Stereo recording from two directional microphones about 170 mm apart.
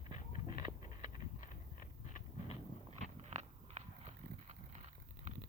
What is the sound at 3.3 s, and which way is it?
Walk, 40° right (ahead or behind).